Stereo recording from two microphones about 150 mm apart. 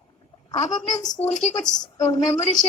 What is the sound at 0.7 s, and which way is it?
Speech, 55° left (ahead or behind).